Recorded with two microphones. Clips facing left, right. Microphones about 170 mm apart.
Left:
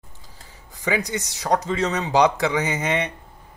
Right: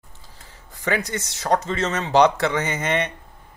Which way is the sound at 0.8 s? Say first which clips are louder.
Even; 15° left (ahead or behind).